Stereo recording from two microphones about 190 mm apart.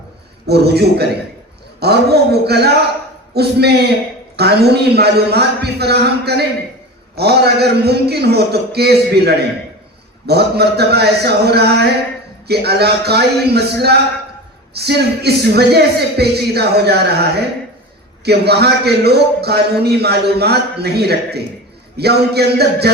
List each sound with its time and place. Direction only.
0.4 s a man's voice: 60° right (ahead or behind)